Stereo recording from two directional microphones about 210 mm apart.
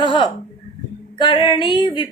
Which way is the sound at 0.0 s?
25° left (ahead or behind).